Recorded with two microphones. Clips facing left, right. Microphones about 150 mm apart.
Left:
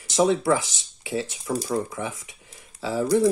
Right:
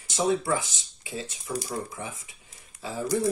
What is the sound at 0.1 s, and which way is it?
Speech, 85° left.